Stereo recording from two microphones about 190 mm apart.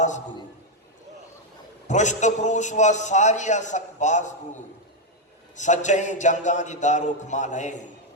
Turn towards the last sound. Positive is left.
turn(degrees=40)  # may be behind; listen again after turning